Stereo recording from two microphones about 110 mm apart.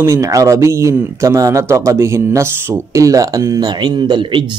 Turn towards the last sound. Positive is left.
turn(degrees=-50)  # may be behind; listen again after turning